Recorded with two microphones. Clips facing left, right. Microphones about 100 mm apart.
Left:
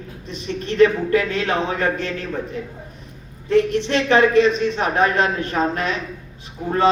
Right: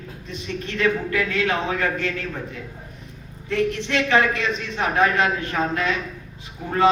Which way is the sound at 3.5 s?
30° left (ahead or behind).